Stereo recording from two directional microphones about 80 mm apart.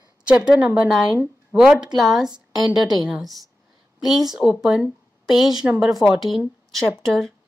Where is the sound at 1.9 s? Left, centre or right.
Right.